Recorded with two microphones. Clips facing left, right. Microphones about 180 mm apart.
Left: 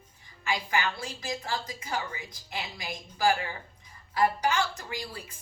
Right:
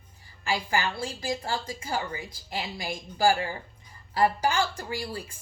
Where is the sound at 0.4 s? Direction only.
30° right (ahead or behind).